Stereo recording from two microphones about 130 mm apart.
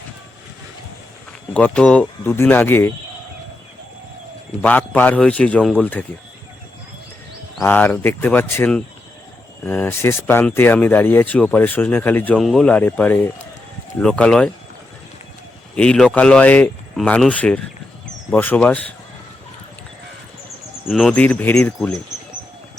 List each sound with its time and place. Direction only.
1.5 s speech: 10° left (ahead or behind)
4.6 s speech: 10° left (ahead or behind)
7.6 s speech: 15° left (ahead or behind)
12.4 s speech: centre (ahead or behind)
15.7 s speech: 5° left (ahead or behind)
20.8 s speech: 5° right (ahead or behind)
21.1 s speech: 10° left (ahead or behind)